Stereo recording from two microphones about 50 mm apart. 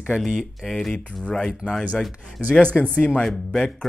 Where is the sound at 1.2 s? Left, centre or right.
Centre.